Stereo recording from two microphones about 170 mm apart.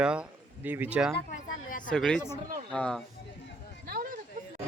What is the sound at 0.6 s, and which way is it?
Music, 10° right (ahead or behind).